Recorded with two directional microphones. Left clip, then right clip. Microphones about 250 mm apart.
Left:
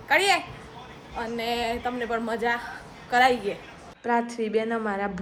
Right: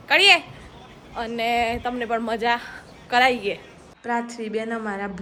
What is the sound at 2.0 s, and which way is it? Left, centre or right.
Speech, right.